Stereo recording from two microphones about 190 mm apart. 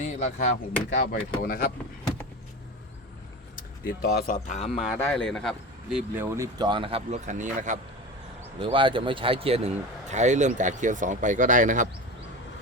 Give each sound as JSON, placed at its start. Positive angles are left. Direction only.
{"t": 0.0, "sound": "speech", "side_deg": 35}
{"t": 0.9, "sound": "speech", "side_deg": 55}
{"t": 3.8, "sound": "a man's voice", "side_deg": 50}
{"t": 5.0, "sound": "speech", "side_deg": 5}
{"t": 8.6, "sound": "a man's voice", "side_deg": -25}